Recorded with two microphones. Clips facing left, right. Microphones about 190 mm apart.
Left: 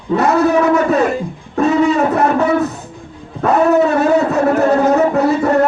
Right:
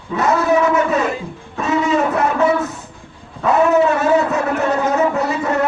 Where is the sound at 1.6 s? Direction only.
35° left (ahead or behind).